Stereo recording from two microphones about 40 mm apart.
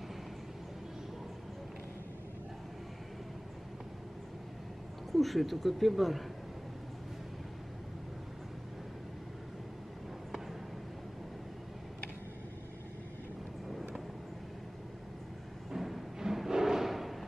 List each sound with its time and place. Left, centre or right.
5.1 s speech: centre
13.7 s vehicle: centre
15.7 s timpani: centre
16.2 s a sound: centre